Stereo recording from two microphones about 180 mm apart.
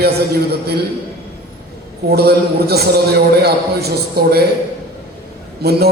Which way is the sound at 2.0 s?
60° right (ahead or behind).